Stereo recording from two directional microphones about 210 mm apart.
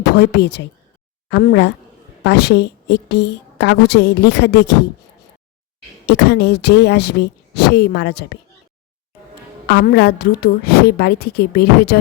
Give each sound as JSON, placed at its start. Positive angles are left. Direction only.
{"t": 0.2, "sound": "a woman's voice", "side_deg": 55}
{"t": 6.1, "sound": "a woman's voice", "side_deg": 55}
{"t": 9.6, "sound": "a woman's voice", "side_deg": 50}